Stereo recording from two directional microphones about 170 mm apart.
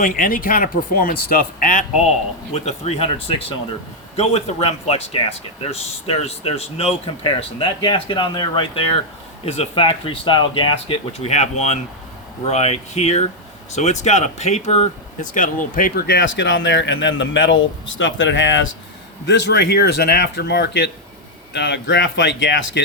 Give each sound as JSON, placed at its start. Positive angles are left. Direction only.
{"t": 0.0, "sound": "speech", "side_deg": 55}
{"t": 2.5, "sound": "speech", "side_deg": 40}